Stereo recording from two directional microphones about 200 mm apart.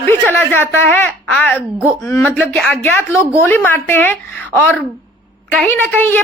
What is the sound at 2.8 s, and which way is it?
A woman's voice, 10° left (ahead or behind).